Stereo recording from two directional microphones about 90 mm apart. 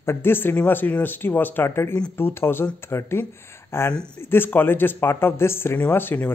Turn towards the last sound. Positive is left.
turn(degrees=20)  # may be behind; listen again after turning